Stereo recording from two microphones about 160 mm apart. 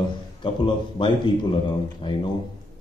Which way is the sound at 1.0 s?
30° left (ahead or behind).